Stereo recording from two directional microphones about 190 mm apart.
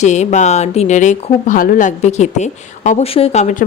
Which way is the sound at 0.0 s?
35° left (ahead or behind).